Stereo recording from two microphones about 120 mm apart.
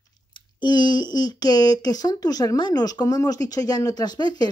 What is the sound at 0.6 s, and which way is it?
Speech, 40° left (ahead or behind).